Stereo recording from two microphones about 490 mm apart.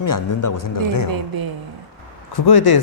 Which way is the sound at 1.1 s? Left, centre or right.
Right.